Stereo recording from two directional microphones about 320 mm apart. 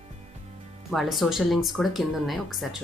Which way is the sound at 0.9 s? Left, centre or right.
Centre.